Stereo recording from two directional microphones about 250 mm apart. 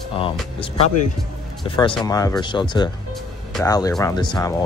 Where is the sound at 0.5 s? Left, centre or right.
Left.